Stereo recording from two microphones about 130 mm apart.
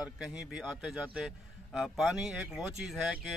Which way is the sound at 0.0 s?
5° right (ahead or behind).